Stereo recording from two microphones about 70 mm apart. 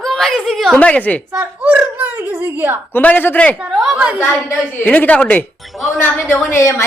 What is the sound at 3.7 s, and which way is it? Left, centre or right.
Speech, centre.